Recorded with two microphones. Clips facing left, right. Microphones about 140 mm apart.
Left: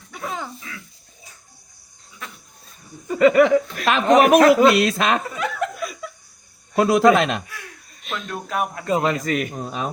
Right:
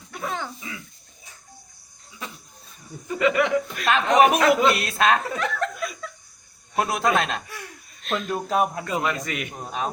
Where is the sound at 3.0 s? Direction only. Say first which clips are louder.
Left 7 dB; 40° left (ahead or behind).